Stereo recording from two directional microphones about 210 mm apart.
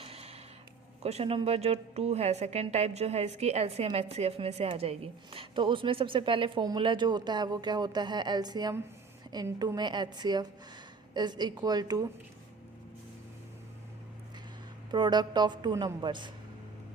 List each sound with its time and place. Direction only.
0.0 s a sound: 30° right (ahead or behind)
1.0 s a woman's voice: 30° right (ahead or behind)
14.8 s a woman's voice: 20° right (ahead or behind)